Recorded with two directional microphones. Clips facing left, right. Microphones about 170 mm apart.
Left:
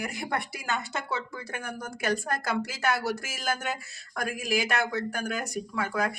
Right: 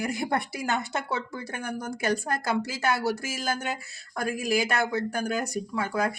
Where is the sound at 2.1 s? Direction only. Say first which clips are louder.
Right 1 dB; 30° right (ahead or behind).